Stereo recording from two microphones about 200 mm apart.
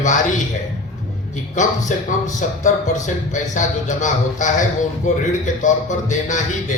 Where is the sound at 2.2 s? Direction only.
40° left (ahead or behind).